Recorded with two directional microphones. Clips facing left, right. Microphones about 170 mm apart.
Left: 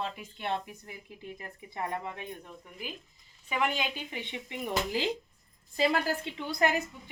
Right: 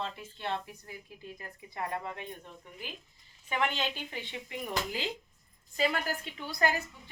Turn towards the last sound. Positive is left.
turn(degrees=25)  # may be behind; listen again after turning